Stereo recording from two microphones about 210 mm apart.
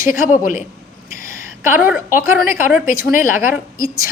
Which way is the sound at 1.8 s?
40° left (ahead or behind).